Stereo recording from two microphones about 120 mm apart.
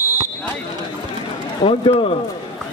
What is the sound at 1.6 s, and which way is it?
Speech, 50° left (ahead or behind).